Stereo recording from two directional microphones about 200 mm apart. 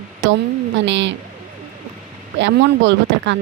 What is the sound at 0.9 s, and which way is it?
Speech, 65° right (ahead or behind).